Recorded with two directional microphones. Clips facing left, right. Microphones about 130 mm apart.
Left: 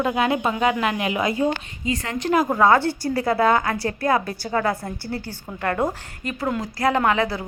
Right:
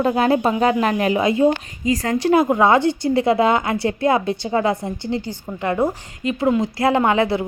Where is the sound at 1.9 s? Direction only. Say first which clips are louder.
Right 6 dB; 40° right (ahead or behind).